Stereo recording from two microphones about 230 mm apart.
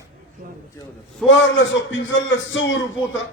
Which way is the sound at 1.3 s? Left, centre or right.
Left.